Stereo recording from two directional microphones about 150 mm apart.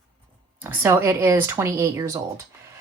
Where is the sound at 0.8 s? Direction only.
20° right (ahead or behind).